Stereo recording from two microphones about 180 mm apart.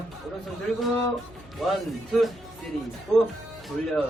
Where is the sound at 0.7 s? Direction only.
Centre (ahead or behind).